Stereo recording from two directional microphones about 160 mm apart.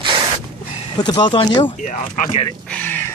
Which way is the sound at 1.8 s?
50° left (ahead or behind).